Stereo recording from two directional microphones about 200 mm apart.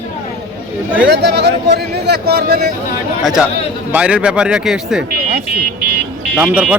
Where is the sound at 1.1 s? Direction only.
55° right (ahead or behind).